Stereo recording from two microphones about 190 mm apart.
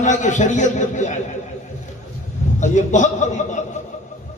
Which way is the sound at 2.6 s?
40° left (ahead or behind).